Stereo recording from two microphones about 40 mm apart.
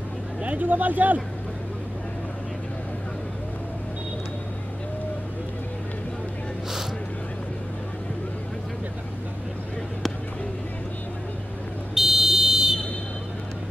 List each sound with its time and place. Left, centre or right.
0.4 s speech: right
11.9 s buzzer: centre